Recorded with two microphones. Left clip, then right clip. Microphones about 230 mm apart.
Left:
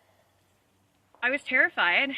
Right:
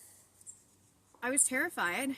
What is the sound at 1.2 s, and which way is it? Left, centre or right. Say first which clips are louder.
Speech: left 9 dB; centre.